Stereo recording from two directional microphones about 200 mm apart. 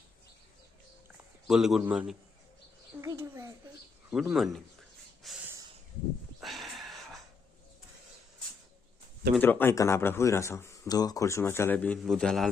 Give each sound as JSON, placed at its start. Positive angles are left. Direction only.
{"t": 1.5, "sound": "a man's voice", "side_deg": 0}
{"t": 3.0, "sound": "a sound", "side_deg": -15}
{"t": 4.1, "sound": "a man's voice", "side_deg": -5}
{"t": 5.2, "sound": "snort", "side_deg": 0}
{"t": 6.4, "sound": "a sound", "side_deg": 0}
{"t": 9.4, "sound": "speech", "side_deg": 10}